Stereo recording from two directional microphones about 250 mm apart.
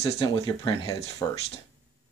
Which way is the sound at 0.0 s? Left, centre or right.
Left.